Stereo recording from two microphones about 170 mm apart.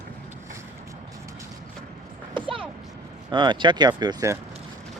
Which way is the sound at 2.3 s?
30° right (ahead or behind).